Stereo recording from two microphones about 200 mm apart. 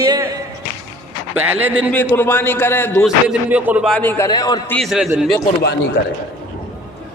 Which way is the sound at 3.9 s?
10° left (ahead or behind).